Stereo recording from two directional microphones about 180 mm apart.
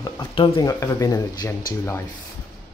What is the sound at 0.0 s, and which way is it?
Speech, 25° left (ahead or behind).